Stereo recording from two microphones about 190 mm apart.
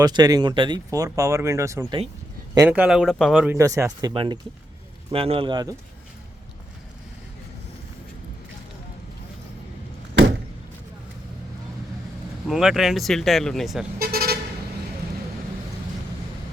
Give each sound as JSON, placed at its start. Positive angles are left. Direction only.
{"t": 0.0, "sound": "speech", "side_deg": -20}
{"t": 3.6, "sound": "speech", "side_deg": -15}
{"t": 12.5, "sound": "speech", "side_deg": 0}
{"t": 14.0, "sound": "vehicle", "side_deg": -55}